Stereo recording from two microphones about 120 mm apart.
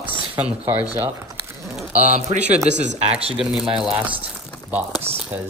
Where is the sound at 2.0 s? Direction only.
70° right (ahead or behind).